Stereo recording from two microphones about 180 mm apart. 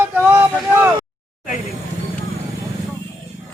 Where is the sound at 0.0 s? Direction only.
10° right (ahead or behind).